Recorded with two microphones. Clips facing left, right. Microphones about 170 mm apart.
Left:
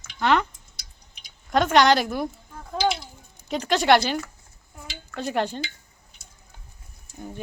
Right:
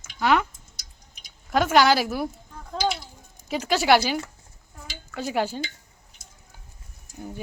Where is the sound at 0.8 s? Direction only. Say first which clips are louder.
Even; 45° right (ahead or behind).